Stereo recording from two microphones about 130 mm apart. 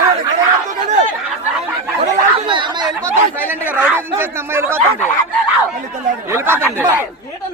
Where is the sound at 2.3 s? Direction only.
40° right (ahead or behind).